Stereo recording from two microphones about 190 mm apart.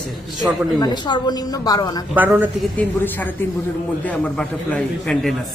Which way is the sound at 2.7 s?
10° left (ahead or behind).